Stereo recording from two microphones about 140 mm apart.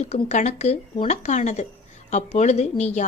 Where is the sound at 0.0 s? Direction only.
55° left (ahead or behind).